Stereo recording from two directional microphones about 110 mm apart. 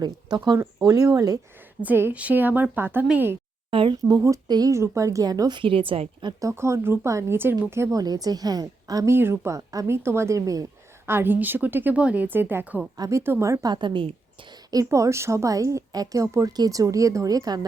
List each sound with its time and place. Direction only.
0.0 s a woman's voice: 40° right (ahead or behind)
1.8 s speech: 20° right (ahead or behind)
3.7 s speech: 55° right (ahead or behind)
4.2 s a woman's voice: 35° right (ahead or behind); by 6.3 s 55° right (ahead or behind)
6.4 s a woman's voice: 25° right (ahead or behind)
9.1 s a woman's voice: 20° right (ahead or behind)
11.1 s speech: 20° right (ahead or behind)
13.0 s a woman's voice: 25° right (ahead or behind); by 14.2 s 50° right (ahead or behind)
14.7 s a woman's voice: 30° right (ahead or behind)